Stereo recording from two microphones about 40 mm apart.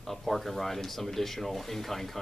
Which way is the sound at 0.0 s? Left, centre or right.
Centre.